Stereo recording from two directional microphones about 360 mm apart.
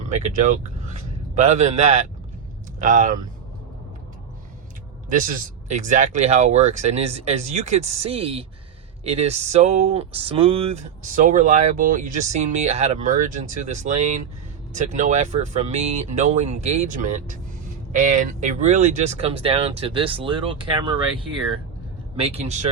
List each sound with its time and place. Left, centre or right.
0.0 s speech: centre
5.0 s speech: right
22.1 s speech: centre